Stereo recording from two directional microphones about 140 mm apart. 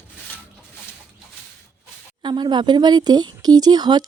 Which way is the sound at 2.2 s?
35° right (ahead or behind).